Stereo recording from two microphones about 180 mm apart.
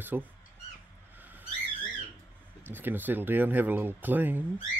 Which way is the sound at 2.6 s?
10° right (ahead or behind).